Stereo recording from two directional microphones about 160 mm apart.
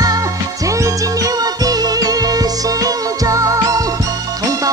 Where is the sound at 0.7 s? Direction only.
20° right (ahead or behind).